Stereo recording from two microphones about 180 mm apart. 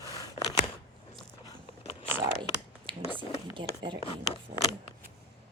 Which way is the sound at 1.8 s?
30° left (ahead or behind).